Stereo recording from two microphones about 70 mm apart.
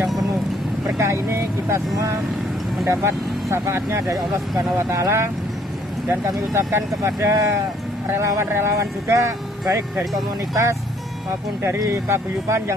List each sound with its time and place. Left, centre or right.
0.9 s speech: right
11.8 s speech: right